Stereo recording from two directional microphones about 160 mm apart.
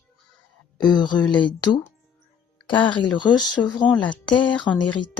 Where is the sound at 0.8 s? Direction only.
25° left (ahead or behind).